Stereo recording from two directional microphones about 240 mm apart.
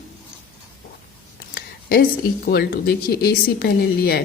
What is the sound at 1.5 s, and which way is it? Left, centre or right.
Speech, left.